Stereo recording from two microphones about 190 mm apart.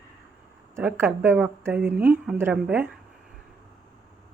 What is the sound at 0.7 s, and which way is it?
Speech, 10° right (ahead or behind).